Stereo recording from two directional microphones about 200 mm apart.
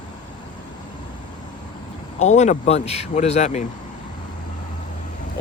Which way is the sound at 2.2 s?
35° left (ahead or behind).